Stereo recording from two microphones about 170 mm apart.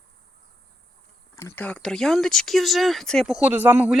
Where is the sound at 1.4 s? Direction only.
15° left (ahead or behind).